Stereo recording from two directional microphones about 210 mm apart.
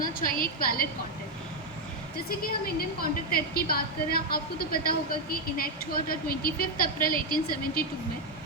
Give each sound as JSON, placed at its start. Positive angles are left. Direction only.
{"t": 0.2, "sound": "a woman's voice", "side_deg": 45}
{"t": 3.0, "sound": "a woman's voice", "side_deg": 45}